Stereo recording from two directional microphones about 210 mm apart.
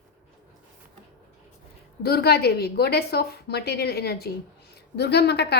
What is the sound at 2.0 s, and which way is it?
A woman's voice, 50° left (ahead or behind).